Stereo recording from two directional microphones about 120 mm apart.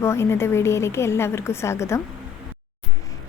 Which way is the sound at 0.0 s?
20° left (ahead or behind).